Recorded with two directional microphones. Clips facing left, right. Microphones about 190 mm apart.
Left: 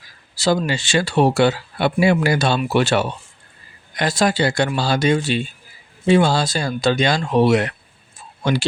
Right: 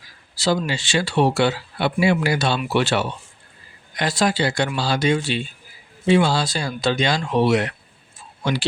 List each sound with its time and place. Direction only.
0.3 s speech: 50° left (ahead or behind)